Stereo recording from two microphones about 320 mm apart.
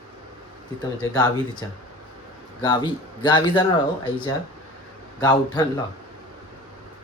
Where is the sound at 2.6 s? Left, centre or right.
Centre.